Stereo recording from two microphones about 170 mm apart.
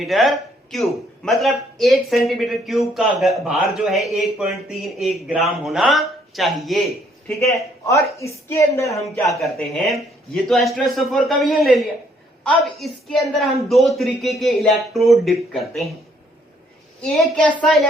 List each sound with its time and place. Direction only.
0.0 s a man's voice: centre (ahead or behind)
7.9 s a man's voice: 15° left (ahead or behind)
9.4 s a man's voice: centre (ahead or behind)
17.0 s a man's voice: 5° left (ahead or behind)